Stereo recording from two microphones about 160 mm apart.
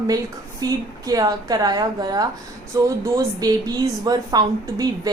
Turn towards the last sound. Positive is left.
turn(degrees=-25)  # may be behind; listen again after turning